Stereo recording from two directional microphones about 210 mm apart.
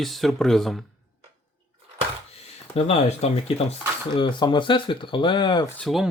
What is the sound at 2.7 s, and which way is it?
Speech, 30° left (ahead or behind).